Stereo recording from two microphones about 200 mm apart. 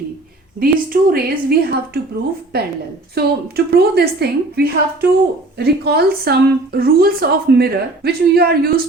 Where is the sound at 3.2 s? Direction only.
55° right (ahead or behind).